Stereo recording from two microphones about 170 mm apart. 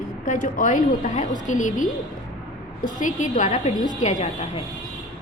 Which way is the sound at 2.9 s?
50° left (ahead or behind).